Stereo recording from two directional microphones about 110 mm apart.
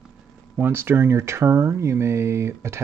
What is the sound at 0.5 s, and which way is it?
Speech, 20° right (ahead or behind).